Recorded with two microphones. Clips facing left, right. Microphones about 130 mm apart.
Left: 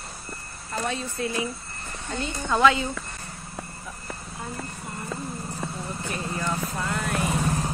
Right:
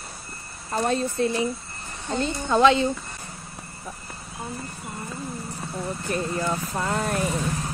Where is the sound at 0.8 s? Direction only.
35° right (ahead or behind).